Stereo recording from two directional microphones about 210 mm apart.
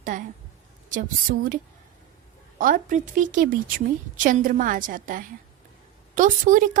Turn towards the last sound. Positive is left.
turn(degrees=-40)  # may be behind; listen again after turning